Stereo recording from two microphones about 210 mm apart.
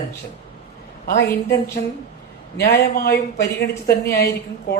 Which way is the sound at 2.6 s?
50° left (ahead or behind).